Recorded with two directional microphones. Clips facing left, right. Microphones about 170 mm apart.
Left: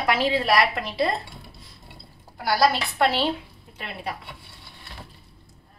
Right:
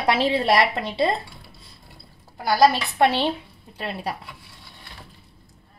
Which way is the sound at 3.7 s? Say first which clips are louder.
Right 4 dB; 35° right (ahead or behind).